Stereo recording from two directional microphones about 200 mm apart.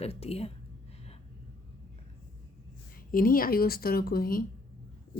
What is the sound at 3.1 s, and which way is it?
Speech, 45° left (ahead or behind).